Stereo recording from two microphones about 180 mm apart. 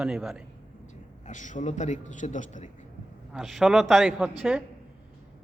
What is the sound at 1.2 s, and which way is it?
A man's voice, 45° left (ahead or behind).